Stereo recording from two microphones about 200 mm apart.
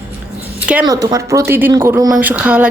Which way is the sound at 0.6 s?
5° right (ahead or behind).